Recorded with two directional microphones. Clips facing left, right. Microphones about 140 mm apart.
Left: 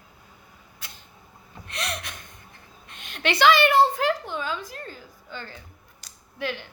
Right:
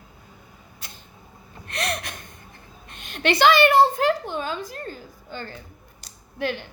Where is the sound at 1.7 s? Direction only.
55° right (ahead or behind).